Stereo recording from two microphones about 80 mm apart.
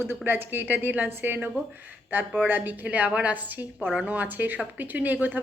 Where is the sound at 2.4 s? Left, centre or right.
Right.